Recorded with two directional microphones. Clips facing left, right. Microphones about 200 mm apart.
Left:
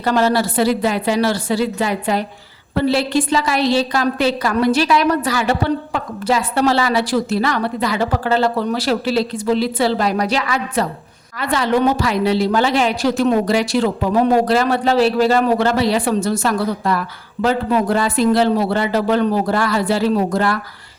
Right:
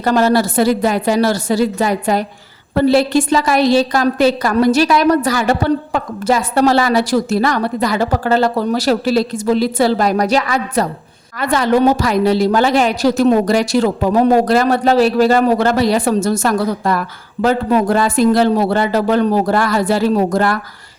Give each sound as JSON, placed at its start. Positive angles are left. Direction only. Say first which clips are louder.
{"t": 0.0, "sound": "a woman's voice", "louder": "right 3 dB", "side_deg": -45}